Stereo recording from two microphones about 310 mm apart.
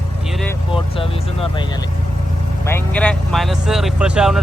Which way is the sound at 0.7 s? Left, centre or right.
Centre.